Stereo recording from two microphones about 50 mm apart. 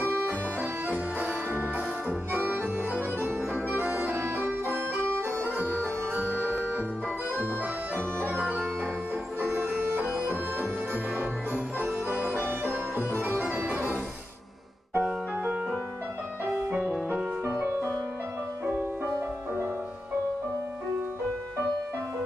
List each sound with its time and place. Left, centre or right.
0.8 s music: right
4.6 s music: right
9.4 s music: right
11.1 s music: right
13.6 s organ: right
15.0 s music: centre